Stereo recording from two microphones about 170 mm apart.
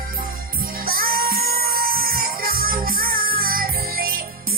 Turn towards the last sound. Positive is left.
turn(degrees=-60)  # may be behind; listen again after turning